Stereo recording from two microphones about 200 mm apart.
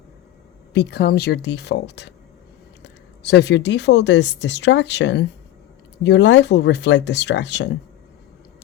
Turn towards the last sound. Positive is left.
turn(degrees=60)  # may be behind; listen again after turning